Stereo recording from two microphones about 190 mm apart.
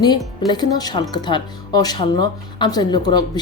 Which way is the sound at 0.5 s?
20° left (ahead or behind).